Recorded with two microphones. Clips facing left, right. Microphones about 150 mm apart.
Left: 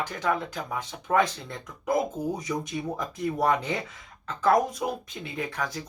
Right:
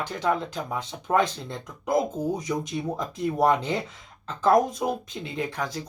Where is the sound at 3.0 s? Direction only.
20° right (ahead or behind).